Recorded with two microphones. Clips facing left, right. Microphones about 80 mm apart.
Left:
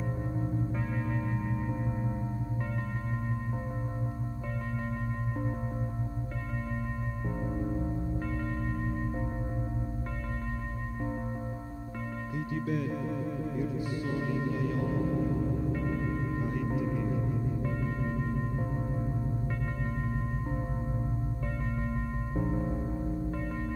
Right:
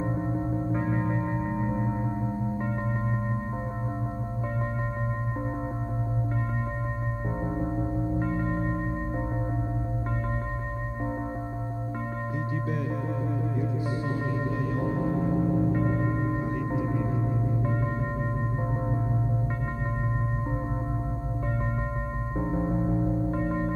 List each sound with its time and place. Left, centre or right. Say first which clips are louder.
0.0 s gong: right 6 dB; right
7.4 s music: right 3 dB; right
14.8 s music: right 5 dB; right
22.4 s music: right 5 dB; right